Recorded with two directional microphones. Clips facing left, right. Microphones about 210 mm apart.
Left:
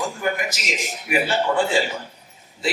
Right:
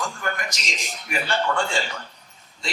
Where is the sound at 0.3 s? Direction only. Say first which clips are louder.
Left 5 dB; 5° left (ahead or behind).